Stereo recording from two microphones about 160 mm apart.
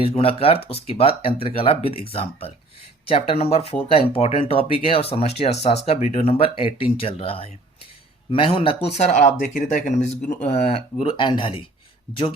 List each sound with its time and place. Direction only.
0.0 s speech: 35° left (ahead or behind)
11.0 s speech: 30° left (ahead or behind)